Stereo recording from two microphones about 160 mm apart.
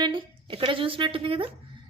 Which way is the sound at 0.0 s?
30° right (ahead or behind).